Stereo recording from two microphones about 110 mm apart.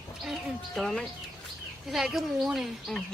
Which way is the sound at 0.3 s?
5° left (ahead or behind).